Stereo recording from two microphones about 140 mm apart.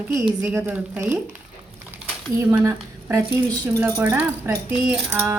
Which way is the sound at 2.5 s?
20° right (ahead or behind).